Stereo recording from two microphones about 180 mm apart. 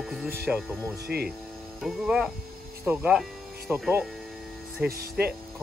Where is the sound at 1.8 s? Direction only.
Centre (ahead or behind).